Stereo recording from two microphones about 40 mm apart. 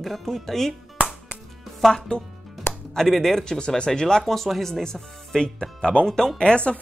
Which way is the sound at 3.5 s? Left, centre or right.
Left.